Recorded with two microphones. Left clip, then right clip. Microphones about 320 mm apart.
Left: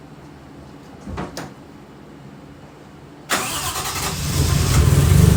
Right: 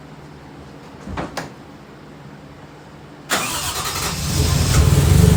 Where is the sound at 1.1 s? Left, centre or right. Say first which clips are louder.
Right 3 dB; centre.